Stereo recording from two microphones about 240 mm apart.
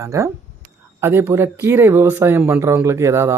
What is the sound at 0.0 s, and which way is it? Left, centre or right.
Speech, centre.